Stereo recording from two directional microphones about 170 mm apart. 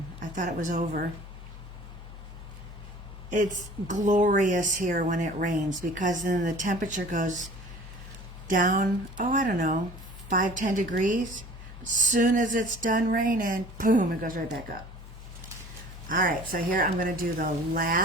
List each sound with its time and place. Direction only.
0.2 s a woman's voice: 45° right (ahead or behind)
3.8 s speech: 45° right (ahead or behind)
8.4 s speech: 50° right (ahead or behind)
16.0 s speech: 50° right (ahead or behind)